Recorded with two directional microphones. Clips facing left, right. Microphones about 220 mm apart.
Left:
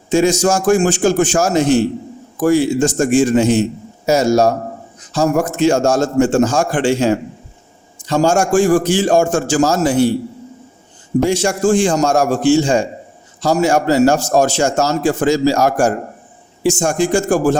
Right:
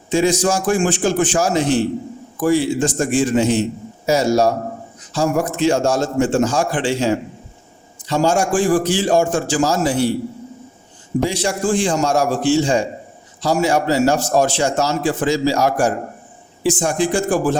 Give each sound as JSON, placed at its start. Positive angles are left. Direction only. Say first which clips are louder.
{"t": 0.1, "sound": "a man's voice", "louder": "left 3 dB", "side_deg": 45}
{"t": 11.2, "sound": "a man's voice", "louder": "left 5 dB", "side_deg": 45}